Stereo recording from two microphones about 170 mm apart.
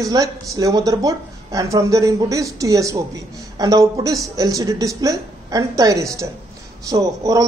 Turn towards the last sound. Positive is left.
turn(degrees=-20)  # may be behind; listen again after turning